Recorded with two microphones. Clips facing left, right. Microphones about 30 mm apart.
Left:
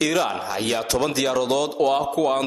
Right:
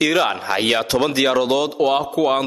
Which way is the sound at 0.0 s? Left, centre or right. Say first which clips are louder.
Right 4 dB; right.